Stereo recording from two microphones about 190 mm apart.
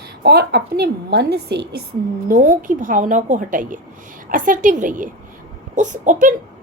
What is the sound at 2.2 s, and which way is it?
A woman's voice, 45° right (ahead or behind).